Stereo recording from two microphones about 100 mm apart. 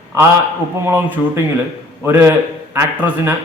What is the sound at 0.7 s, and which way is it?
A man's voice, 25° right (ahead or behind).